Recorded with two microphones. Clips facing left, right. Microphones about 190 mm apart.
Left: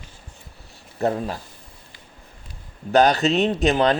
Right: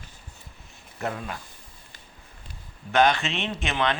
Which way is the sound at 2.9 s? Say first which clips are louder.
Left 5 dB; 40° left (ahead or behind).